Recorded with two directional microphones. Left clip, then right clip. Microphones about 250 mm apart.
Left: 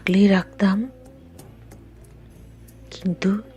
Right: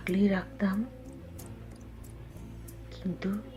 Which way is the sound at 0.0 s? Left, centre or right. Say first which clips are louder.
Left 10 dB; left.